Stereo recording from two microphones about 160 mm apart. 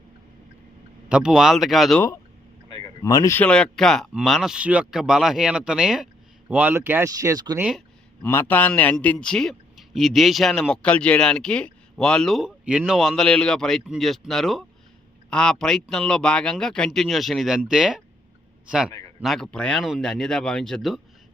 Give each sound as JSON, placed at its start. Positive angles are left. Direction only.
{"t": 1.0, "sound": "a man's voice", "side_deg": -5}
{"t": 3.0, "sound": "speech", "side_deg": 20}
{"t": 3.4, "sound": "a man's voice", "side_deg": 5}
{"t": 8.2, "sound": "a man's voice", "side_deg": 10}
{"t": 19.2, "sound": "a man's voice", "side_deg": 0}